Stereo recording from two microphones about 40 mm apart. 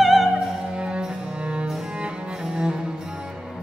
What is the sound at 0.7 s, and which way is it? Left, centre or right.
Music, right.